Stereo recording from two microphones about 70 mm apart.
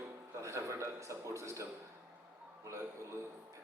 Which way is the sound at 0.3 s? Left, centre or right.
Right.